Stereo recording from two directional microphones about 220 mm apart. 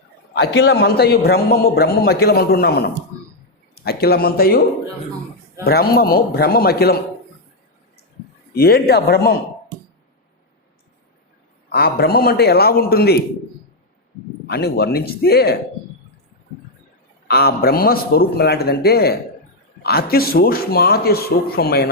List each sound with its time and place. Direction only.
0.3 s a man's voice: 50° left (ahead or behind)
5.6 s a man's voice: 45° left (ahead or behind)
8.5 s a man's voice: 45° left (ahead or behind)
11.7 s a man's voice: 45° left (ahead or behind)
14.4 s a man's voice: 45° left (ahead or behind)
17.2 s a man's voice: 45° left (ahead or behind)